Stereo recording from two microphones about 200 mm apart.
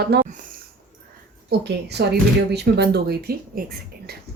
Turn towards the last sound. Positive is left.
turn(degrees=-50)  # may be behind; listen again after turning